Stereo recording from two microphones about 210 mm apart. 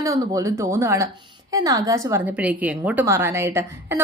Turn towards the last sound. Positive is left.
turn(degrees=-10)  # may be behind; listen again after turning